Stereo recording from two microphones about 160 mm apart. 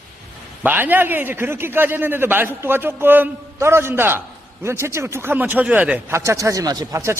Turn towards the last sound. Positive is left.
turn(degrees=-20)  # may be behind; listen again after turning